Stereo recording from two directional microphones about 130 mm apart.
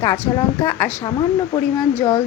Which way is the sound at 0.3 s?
20° left (ahead or behind).